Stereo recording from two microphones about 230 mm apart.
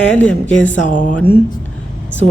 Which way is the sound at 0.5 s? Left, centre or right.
Centre.